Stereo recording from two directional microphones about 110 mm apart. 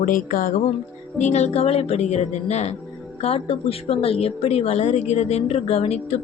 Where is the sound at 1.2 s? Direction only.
90° left.